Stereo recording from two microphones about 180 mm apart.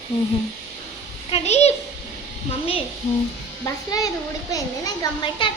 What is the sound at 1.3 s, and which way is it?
A child's voice, 35° left (ahead or behind).